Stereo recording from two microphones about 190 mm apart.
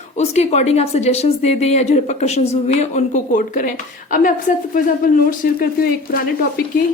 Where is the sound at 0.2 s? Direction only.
35° left (ahead or behind); by 6.2 s 50° left (ahead or behind).